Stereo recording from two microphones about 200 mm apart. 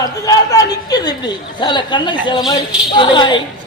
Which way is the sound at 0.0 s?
20° left (ahead or behind).